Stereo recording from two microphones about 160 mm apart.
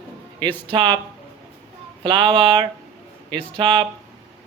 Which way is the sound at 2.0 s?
30° right (ahead or behind).